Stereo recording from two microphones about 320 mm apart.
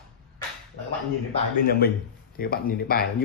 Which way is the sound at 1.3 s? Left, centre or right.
Left.